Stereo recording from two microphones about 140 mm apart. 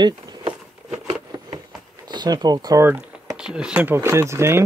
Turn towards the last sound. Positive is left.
turn(degrees=-20)  # may be behind; listen again after turning